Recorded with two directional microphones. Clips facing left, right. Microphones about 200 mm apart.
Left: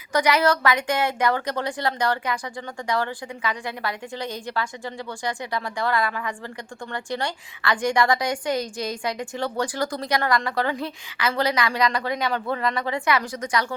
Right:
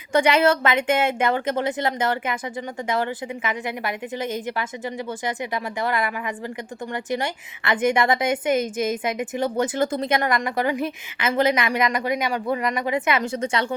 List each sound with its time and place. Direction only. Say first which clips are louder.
0.1 s a woman's voice: right 2 dB; 25° right (ahead or behind)